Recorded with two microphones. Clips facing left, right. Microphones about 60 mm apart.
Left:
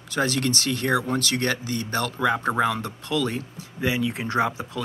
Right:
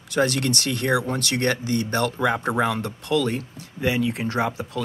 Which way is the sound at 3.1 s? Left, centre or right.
Right.